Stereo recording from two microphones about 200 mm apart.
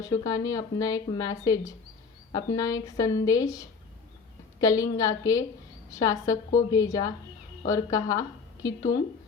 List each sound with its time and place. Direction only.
0.0 s speech: 15° left (ahead or behind)